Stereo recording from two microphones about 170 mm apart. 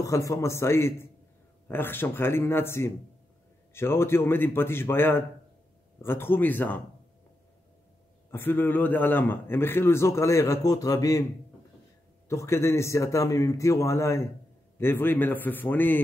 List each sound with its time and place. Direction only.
0.0 s a man's voice: 20° left (ahead or behind)
8.3 s a man's voice: 10° left (ahead or behind)
12.3 s a man's voice: 15° left (ahead or behind)